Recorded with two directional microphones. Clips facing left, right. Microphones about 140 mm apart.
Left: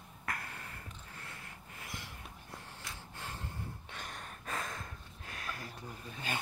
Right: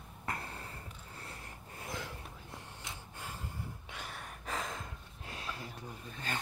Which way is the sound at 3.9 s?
10° right (ahead or behind).